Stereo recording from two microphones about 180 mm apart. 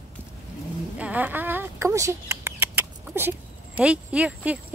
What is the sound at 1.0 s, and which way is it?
Mouse, 10° right (ahead or behind).